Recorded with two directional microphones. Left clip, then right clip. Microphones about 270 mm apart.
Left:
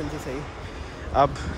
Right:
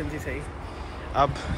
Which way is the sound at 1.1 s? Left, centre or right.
Left.